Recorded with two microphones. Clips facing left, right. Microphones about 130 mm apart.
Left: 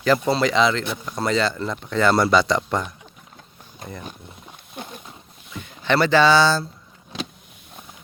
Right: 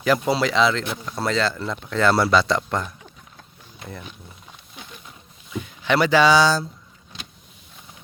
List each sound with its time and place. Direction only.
0.0 s speech: 10° right (ahead or behind)
4.7 s a sound: 55° left (ahead or behind)
5.5 s speech: 10° right (ahead or behind)